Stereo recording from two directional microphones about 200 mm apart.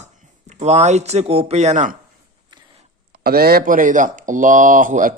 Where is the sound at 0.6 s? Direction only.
35° right (ahead or behind).